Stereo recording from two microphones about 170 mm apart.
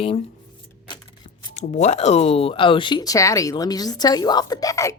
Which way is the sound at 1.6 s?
40° left (ahead or behind).